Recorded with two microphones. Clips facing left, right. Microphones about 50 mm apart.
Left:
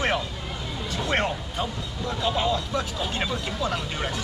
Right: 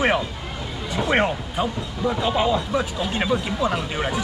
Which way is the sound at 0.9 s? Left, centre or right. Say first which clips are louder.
Right 5 dB; centre.